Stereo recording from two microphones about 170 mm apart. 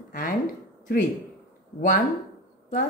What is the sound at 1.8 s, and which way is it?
Speech, 50° left (ahead or behind).